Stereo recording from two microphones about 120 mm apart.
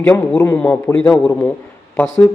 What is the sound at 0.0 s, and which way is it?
A man's voice, 10° left (ahead or behind).